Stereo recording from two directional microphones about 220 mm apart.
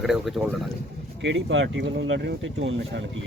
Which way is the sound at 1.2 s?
55° right (ahead or behind).